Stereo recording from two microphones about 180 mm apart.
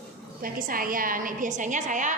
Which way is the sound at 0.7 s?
50° right (ahead or behind).